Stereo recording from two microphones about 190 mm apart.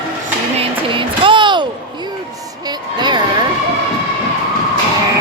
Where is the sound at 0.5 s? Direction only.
25° right (ahead or behind).